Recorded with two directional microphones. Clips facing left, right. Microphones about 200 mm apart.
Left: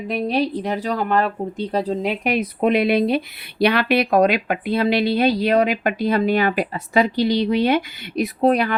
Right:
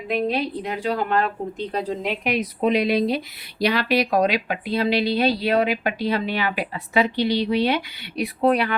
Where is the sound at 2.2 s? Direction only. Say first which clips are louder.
Left 2 dB; 55° left (ahead or behind).